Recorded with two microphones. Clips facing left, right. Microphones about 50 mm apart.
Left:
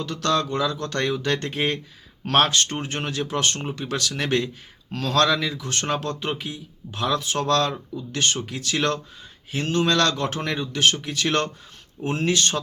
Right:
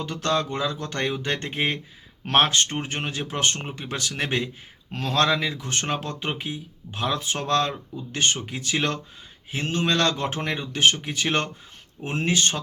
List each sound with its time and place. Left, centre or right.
0.0 s speech: right